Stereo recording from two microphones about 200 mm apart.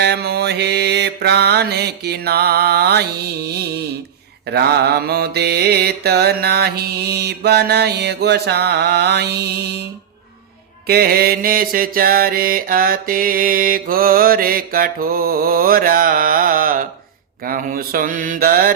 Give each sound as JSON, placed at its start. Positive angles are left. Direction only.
{"t": 0.0, "sound": "mantra", "side_deg": -55}
{"t": 10.8, "sound": "mantra", "side_deg": -50}